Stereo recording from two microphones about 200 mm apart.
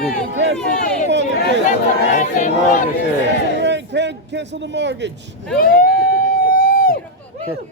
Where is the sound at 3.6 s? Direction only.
60° right (ahead or behind).